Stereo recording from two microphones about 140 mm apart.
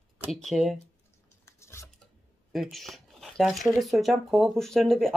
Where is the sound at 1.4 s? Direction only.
20° left (ahead or behind).